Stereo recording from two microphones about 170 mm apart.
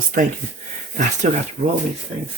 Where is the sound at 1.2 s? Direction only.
40° right (ahead or behind).